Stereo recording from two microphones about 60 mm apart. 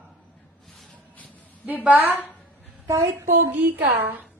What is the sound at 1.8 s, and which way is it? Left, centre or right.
Speech, right.